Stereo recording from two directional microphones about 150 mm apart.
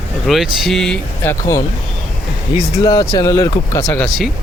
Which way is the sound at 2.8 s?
20° left (ahead or behind).